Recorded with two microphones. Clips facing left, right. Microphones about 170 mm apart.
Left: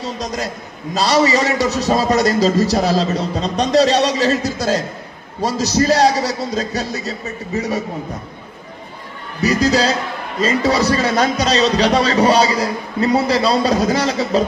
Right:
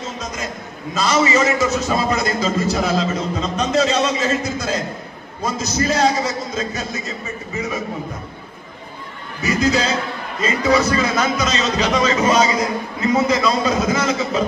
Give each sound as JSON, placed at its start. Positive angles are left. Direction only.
{"t": 0.0, "sound": "a sound", "side_deg": 35}
{"t": 0.9, "sound": "a man's voice", "side_deg": 35}
{"t": 9.4, "sound": "a man's voice", "side_deg": 35}